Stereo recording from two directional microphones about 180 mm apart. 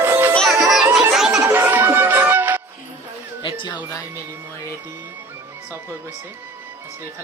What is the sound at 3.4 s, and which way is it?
Music, 25° left (ahead or behind).